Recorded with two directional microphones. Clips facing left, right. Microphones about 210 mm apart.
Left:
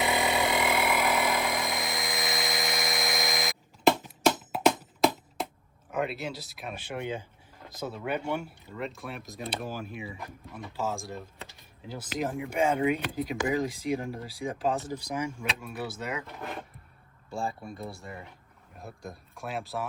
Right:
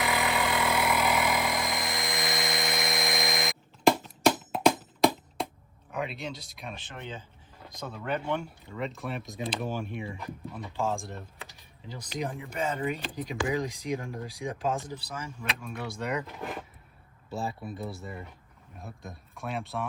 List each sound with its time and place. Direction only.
0.0 s a sound: 20° left (ahead or behind)
0.8 s helicopter: centre (ahead or behind)
4.8 s music: 5° left (ahead or behind)
5.9 s speech: centre (ahead or behind)
17.6 s speech: centre (ahead or behind)